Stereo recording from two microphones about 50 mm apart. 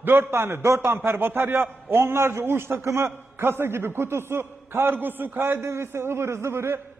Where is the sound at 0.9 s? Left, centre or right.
Right.